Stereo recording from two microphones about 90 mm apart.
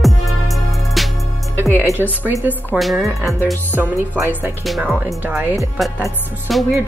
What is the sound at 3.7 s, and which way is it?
A woman's voice, 25° right (ahead or behind).